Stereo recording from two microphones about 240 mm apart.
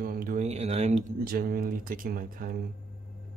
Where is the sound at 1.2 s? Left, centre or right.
Right.